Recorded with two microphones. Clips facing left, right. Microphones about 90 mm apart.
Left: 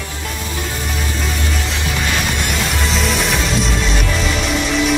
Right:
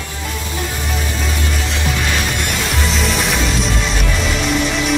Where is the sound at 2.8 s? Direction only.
Centre (ahead or behind).